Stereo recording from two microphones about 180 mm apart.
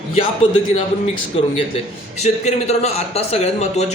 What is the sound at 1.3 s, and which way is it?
A man's voice, 30° left (ahead or behind).